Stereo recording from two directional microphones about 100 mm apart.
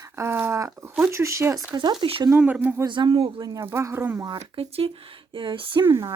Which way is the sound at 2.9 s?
55° right (ahead or behind).